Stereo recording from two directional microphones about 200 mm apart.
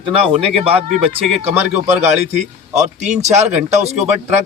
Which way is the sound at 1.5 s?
10° right (ahead or behind).